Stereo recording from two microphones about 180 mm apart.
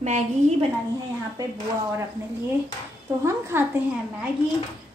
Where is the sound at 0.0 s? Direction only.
40° right (ahead or behind).